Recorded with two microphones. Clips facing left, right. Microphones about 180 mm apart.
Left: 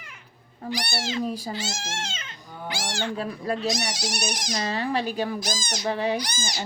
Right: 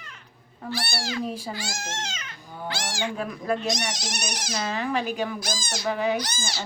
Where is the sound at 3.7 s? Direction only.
10° left (ahead or behind).